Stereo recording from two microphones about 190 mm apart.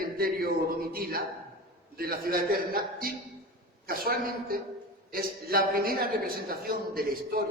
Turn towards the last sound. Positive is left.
turn(degrees=-50)  # may be behind; listen again after turning